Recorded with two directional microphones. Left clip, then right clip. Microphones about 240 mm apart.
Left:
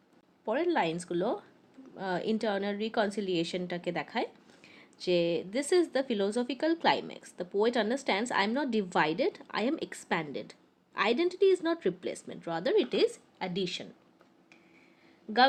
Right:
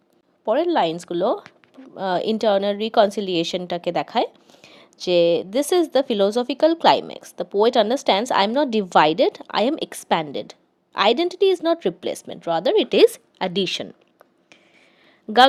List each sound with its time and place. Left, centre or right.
0.4 s a woman's voice: right